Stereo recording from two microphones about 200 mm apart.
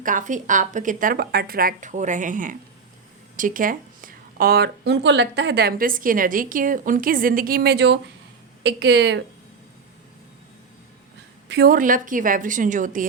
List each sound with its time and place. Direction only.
0.0 s a woman's voice: 40° right (ahead or behind); by 9.2 s 60° right (ahead or behind)
11.4 s speech: 55° right (ahead or behind)